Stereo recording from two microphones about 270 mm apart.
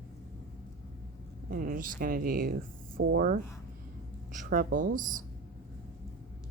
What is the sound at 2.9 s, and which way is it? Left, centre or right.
Speech, right.